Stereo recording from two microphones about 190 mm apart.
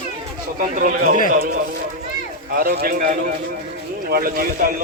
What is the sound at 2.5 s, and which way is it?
Speech, 50° right (ahead or behind).